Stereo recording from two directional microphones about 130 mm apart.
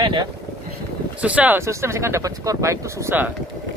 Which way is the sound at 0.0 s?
40° right (ahead or behind).